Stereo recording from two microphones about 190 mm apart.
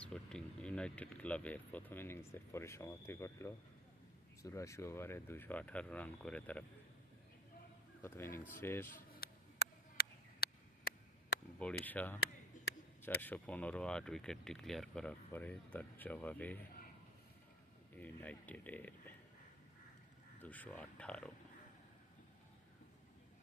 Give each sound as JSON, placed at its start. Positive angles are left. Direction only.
{"t": 0.0, "sound": "speech", "side_deg": 5}
{"t": 8.0, "sound": "speech", "side_deg": 10}
{"t": 8.9, "sound": "a sound", "side_deg": 55}
{"t": 11.9, "sound": "speech", "side_deg": 10}
{"t": 17.9, "sound": "speech", "side_deg": 10}
{"t": 20.4, "sound": "speech", "side_deg": 10}